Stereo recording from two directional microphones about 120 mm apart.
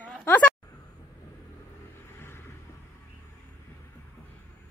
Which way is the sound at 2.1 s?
20° left (ahead or behind).